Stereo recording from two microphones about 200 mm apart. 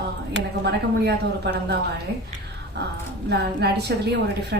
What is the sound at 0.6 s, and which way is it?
Speech, 55° right (ahead or behind).